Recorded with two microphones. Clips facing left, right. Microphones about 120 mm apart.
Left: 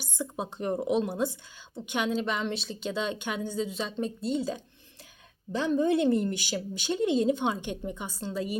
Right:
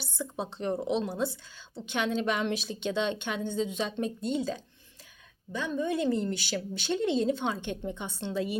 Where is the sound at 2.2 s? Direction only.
5° right (ahead or behind).